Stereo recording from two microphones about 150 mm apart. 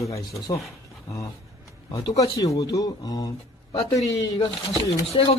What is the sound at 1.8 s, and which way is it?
Speech, 30° left (ahead or behind).